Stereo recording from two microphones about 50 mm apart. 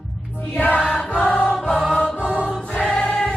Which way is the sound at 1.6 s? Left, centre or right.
Centre.